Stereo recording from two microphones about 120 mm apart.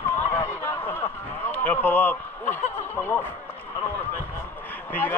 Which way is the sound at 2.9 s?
20° left (ahead or behind).